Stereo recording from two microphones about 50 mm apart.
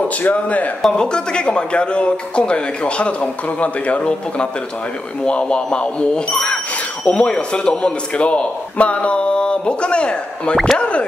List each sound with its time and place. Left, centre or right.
0.2 s speech: left
0.8 s a man's voice: centre